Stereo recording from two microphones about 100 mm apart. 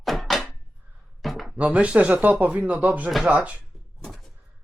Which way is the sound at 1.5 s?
10° right (ahead or behind).